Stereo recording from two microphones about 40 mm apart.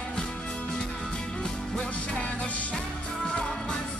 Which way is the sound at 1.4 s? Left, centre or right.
Centre.